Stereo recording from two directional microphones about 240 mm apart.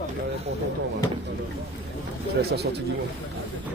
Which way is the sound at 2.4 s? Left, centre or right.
Right.